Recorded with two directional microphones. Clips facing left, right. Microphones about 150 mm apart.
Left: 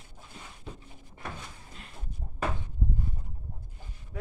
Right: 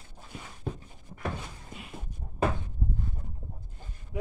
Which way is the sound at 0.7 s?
50° right (ahead or behind).